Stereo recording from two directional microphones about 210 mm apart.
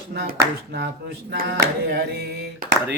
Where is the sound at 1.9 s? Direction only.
50° right (ahead or behind).